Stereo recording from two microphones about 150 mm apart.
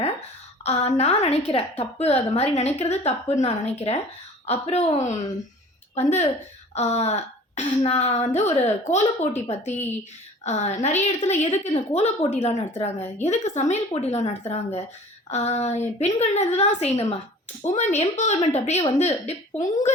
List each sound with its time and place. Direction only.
0.6 s a woman's voice: 45° left (ahead or behind)
10.4 s a woman's voice: 50° left (ahead or behind)